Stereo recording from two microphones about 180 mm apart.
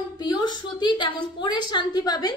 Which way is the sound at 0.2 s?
25° left (ahead or behind).